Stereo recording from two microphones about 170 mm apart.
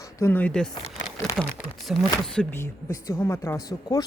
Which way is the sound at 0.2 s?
10° left (ahead or behind).